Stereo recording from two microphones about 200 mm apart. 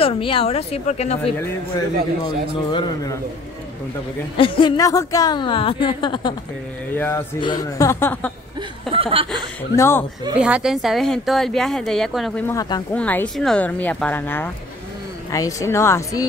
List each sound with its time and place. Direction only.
0.0 s a woman's voice: 25° left (ahead or behind)
2.2 s a woman's voice: 20° left (ahead or behind)
4.4 s a woman's voice: 25° left (ahead or behind)
6.9 s speech: 10° left (ahead or behind)
7.3 s speech: 20° left (ahead or behind)
8.9 s speech: 25° right (ahead or behind)
9.8 s speech: 10° left (ahead or behind)
10.4 s a woman's voice: 5° right (ahead or behind)
12.4 s a woman's voice: 20° left (ahead or behind)
12.9 s speech: 5° left (ahead or behind)